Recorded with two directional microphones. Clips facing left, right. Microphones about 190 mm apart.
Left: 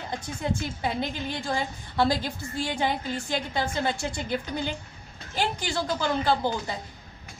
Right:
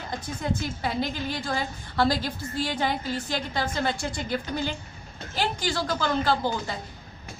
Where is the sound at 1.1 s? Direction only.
20° left (ahead or behind).